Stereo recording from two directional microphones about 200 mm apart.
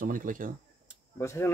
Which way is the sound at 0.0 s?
45° right (ahead or behind).